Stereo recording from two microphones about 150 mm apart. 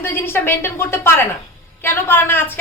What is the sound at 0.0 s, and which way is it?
A woman's voice, 15° left (ahead or behind).